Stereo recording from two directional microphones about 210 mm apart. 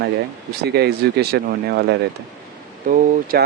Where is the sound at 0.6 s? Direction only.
50° right (ahead or behind).